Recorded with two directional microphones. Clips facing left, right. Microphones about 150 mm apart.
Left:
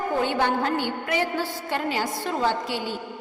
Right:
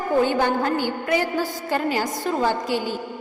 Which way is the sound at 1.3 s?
40° right (ahead or behind).